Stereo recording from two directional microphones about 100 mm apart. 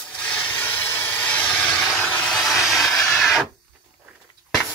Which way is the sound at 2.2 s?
Centre (ahead or behind).